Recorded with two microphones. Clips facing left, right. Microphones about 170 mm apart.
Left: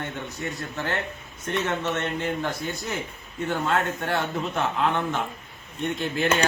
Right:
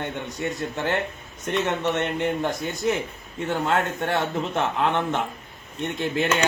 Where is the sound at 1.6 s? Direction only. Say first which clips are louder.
Right 3 dB; 15° right (ahead or behind).